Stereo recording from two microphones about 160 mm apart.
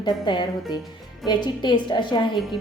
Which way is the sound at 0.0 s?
30° left (ahead or behind).